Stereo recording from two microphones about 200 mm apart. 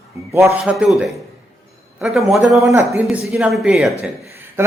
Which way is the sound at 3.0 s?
5° right (ahead or behind).